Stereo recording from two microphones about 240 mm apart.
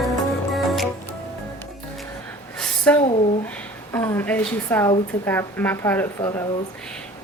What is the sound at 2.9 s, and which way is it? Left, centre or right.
Speech, left.